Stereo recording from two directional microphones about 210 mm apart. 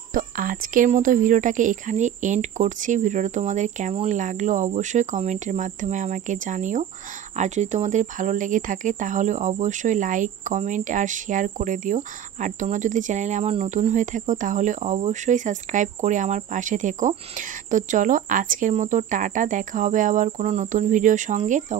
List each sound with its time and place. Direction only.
0.1 s speech: 40° right (ahead or behind)